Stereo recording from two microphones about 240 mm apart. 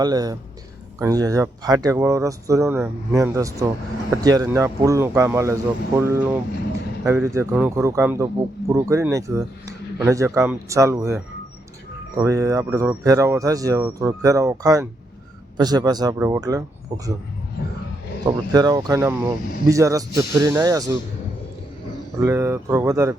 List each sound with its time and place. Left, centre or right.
0.0 s speech: centre
18.3 s speech: centre
22.2 s speech: centre